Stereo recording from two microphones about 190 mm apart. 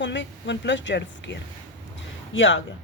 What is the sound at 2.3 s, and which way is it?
Speech, 80° left.